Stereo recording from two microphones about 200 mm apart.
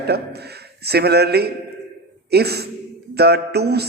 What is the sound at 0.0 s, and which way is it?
Speech, 55° right (ahead or behind).